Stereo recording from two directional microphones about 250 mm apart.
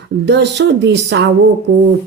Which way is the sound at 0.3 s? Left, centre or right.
Right.